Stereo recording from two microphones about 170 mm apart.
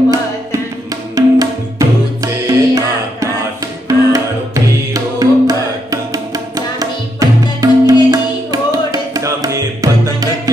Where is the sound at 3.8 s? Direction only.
20° right (ahead or behind).